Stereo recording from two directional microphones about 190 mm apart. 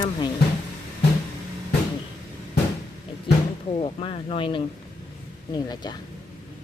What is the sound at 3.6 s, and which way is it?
Speech, 30° left (ahead or behind).